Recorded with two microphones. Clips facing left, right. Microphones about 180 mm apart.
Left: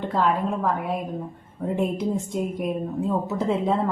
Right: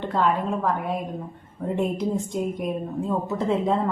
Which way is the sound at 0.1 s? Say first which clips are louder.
Even; centre (ahead or behind).